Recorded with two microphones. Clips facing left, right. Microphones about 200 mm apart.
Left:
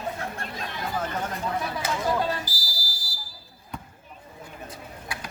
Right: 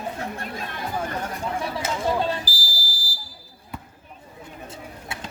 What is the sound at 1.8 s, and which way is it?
Fire alarm, 25° right (ahead or behind).